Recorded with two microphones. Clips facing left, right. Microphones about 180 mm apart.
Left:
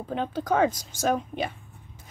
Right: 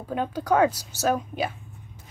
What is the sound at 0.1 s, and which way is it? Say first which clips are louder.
Speech: right 3 dB; 10° right (ahead or behind).